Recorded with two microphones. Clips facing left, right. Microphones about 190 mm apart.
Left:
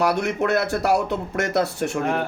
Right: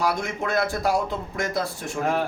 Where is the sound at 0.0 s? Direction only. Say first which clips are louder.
Left 5 dB; 70° left (ahead or behind).